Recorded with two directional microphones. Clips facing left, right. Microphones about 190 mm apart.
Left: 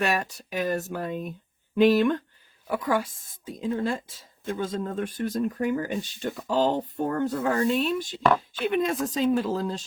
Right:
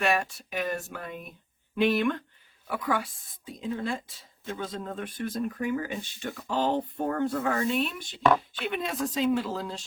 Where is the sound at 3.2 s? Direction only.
45° left (ahead or behind).